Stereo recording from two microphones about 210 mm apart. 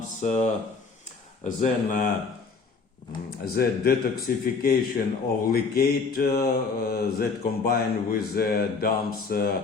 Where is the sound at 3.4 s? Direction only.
45° left (ahead or behind).